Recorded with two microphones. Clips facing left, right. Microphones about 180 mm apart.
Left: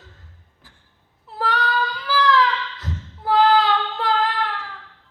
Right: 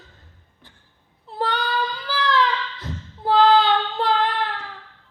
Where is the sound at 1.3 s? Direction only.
25° right (ahead or behind).